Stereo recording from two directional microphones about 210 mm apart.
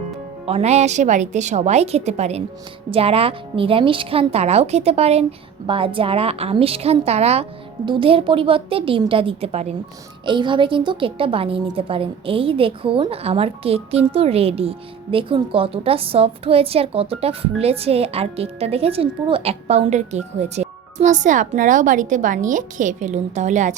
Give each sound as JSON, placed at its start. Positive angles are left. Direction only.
{"t": 0.4, "sound": "a woman's voice", "side_deg": -30}